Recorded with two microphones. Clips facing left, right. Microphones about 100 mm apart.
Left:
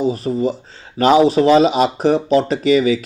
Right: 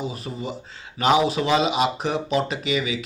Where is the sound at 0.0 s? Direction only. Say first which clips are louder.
Left 12 dB; 40° left (ahead or behind).